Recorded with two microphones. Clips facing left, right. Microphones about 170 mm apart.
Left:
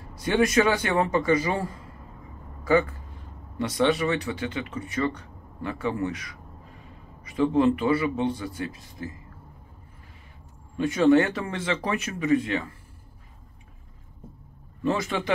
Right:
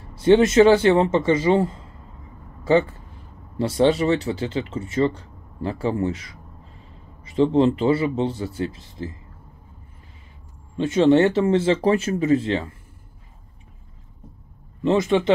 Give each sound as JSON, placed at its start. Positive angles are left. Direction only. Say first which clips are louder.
{"t": 0.1, "sound": "a man's voice", "louder": "right 7 dB", "side_deg": -25}
{"t": 10.8, "sound": "speech", "louder": "right 3 dB", "side_deg": -25}
{"t": 14.8, "sound": "speech", "louder": "right 7 dB", "side_deg": -20}